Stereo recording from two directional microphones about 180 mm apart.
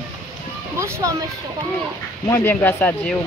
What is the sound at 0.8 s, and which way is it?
Speech, 15° right (ahead or behind).